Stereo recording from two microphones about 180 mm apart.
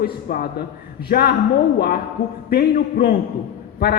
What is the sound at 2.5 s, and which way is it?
Speech, 60° left (ahead or behind).